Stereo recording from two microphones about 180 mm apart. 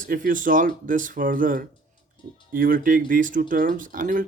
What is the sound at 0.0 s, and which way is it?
Speech, 50° right (ahead or behind).